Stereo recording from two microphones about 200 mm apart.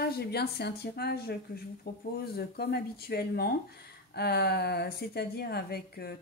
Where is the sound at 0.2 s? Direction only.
55° left (ahead or behind).